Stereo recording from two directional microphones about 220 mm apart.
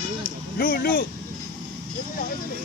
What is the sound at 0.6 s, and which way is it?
Speech, 40° left (ahead or behind).